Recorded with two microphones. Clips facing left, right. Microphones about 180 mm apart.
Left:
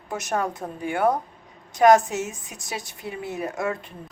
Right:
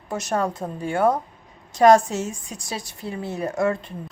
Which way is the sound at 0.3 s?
Centre (ahead or behind).